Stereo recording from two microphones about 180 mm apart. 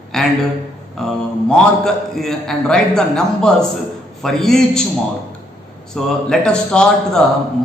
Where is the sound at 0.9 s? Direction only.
Centre (ahead or behind).